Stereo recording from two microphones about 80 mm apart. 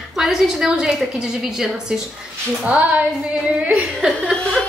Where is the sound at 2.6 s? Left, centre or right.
Centre.